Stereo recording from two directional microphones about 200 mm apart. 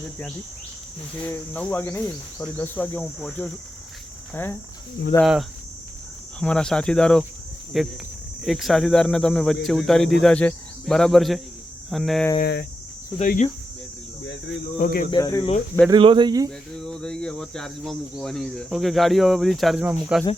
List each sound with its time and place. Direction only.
1.2 s speech: 10° left (ahead or behind)
5.2 s speech: centre (ahead or behind)
12.4 s cricket: 55° left (ahead or behind)
13.1 s speech: 40° left (ahead or behind)
14.8 s speech: 45° left (ahead or behind)
15.1 s speech: 15° left (ahead or behind)
15.9 s speech: 25° right (ahead or behind)
16.7 s speech: 5° left (ahead or behind)